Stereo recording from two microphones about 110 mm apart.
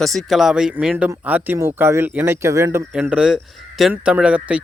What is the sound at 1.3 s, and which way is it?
Speech, 15° right (ahead or behind).